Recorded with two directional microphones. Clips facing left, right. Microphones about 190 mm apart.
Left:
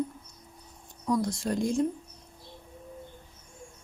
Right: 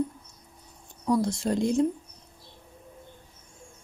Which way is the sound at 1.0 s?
30° right (ahead or behind).